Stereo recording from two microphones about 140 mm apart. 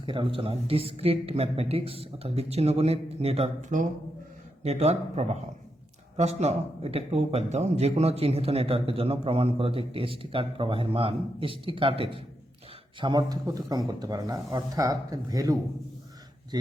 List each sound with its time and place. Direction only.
0.0 s speech: 35° right (ahead or behind)
3.7 s speech: 65° right (ahead or behind)
4.6 s speech: 50° right (ahead or behind); by 15.5 s 25° right (ahead or behind)